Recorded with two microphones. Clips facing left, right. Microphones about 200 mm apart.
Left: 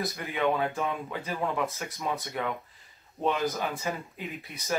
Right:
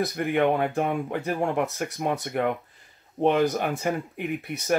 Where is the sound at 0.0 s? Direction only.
55° right (ahead or behind).